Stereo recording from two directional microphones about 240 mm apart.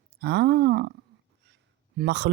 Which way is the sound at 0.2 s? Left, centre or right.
Right.